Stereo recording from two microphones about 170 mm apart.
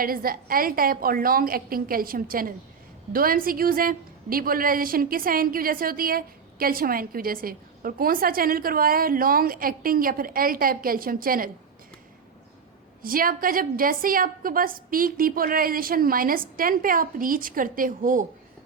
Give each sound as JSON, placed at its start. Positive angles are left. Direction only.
{"t": 0.0, "sound": "a woman's voice", "side_deg": -60}
{"t": 13.0, "sound": "a woman's voice", "side_deg": -55}